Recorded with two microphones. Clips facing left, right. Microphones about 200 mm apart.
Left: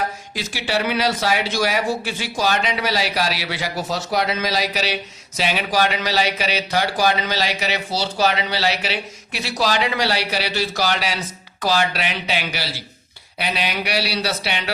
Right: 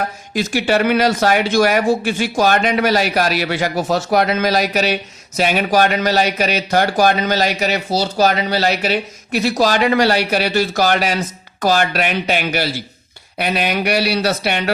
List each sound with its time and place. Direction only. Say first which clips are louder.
0.3 s speech: right 8 dB; 50° right (ahead or behind)